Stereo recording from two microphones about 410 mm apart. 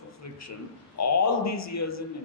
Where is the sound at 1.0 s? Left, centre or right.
Left.